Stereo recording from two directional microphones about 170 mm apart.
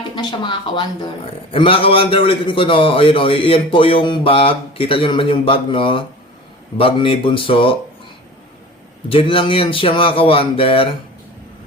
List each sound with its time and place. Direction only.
0.2 s a man's voice: 25° left (ahead or behind)
9.0 s a man's voice: 30° left (ahead or behind)